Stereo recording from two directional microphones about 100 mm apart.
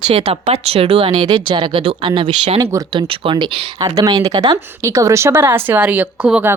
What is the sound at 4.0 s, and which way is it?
Speech, 35° right (ahead or behind).